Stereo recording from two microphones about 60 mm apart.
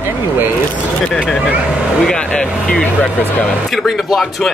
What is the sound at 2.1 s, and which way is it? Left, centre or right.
Speech, centre.